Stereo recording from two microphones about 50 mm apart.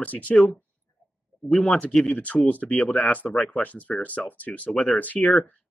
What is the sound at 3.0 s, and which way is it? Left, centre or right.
Speech, left.